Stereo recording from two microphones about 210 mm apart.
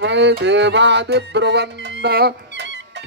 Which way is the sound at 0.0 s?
55° right (ahead or behind).